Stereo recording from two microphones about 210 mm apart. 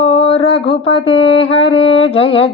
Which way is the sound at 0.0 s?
30° left (ahead or behind).